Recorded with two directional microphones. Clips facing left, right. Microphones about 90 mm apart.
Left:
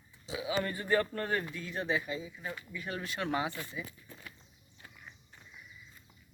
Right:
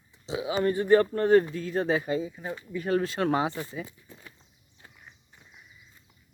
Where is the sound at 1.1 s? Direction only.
30° right (ahead or behind); by 2.4 s 45° right (ahead or behind).